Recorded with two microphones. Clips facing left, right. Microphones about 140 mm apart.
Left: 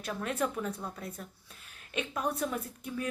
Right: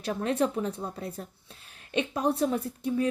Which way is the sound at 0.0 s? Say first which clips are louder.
Right 6 dB; 30° right (ahead or behind).